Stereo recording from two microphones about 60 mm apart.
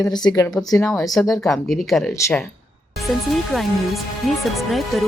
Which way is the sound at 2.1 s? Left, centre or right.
Left.